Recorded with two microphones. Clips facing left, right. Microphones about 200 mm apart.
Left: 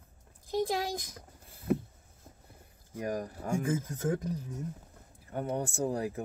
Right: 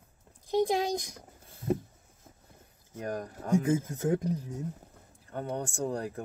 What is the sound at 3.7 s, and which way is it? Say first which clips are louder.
Speech: right 3 dB; 20° right (ahead or behind).